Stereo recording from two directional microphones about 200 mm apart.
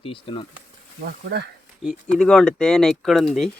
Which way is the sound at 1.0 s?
55° right (ahead or behind).